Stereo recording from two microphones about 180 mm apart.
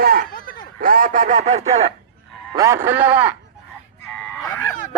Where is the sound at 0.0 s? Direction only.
55° right (ahead or behind).